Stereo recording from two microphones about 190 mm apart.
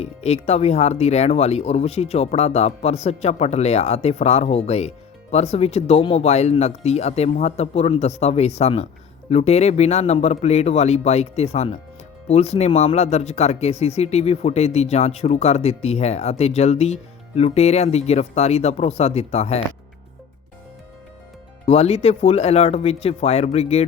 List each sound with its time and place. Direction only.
0.0 s speech: 35° left (ahead or behind)
21.7 s speech: 35° left (ahead or behind)